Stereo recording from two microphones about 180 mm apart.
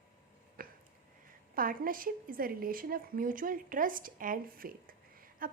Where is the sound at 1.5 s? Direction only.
50° right (ahead or behind).